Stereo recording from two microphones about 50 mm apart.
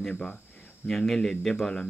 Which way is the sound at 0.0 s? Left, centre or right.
Centre.